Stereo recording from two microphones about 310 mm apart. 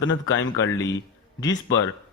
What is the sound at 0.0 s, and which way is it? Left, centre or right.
Speech, left.